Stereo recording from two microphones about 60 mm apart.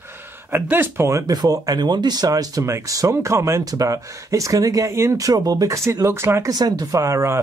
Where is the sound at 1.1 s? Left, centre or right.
Right.